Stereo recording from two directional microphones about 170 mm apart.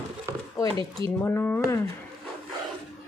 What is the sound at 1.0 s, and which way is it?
Speech, 15° left (ahead or behind).